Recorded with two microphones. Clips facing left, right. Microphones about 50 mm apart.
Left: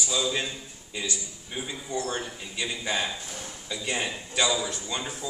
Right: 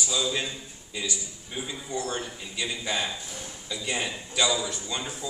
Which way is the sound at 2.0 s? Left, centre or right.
Left.